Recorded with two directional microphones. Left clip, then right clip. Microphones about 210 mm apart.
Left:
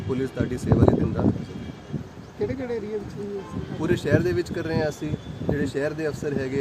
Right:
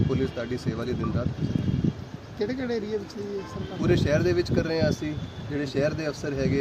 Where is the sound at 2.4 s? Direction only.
50° right (ahead or behind).